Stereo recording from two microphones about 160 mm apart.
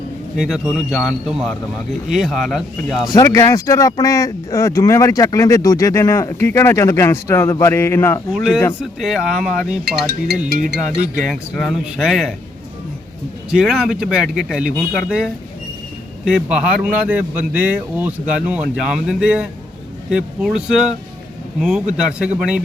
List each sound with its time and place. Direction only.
0.3 s speech: centre (ahead or behind)
3.3 s speech: 20° left (ahead or behind)
8.3 s speech: centre (ahead or behind)
10.5 s speech: 75° right (ahead or behind)
11.2 s speech: centre (ahead or behind)
13.5 s speech: 5° right (ahead or behind)